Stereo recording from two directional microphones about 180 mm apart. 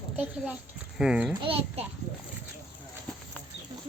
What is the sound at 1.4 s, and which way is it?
Speech, 30° right (ahead or behind).